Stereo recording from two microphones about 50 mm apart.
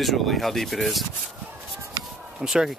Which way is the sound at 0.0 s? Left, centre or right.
Centre.